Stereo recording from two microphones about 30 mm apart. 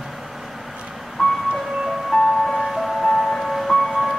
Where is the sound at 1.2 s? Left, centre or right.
Centre.